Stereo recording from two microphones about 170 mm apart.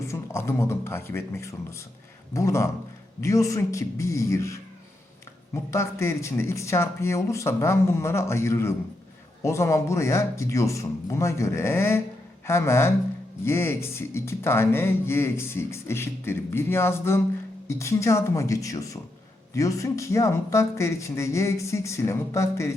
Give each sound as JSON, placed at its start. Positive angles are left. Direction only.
{"t": 0.0, "sound": "speech", "side_deg": 15}
{"t": 5.7, "sound": "speech", "side_deg": 15}